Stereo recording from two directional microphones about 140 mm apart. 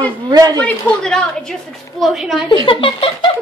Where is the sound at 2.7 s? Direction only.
40° left (ahead or behind).